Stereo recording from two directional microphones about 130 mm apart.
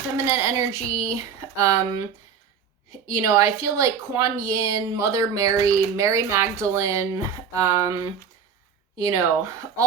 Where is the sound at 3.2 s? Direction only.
25° right (ahead or behind).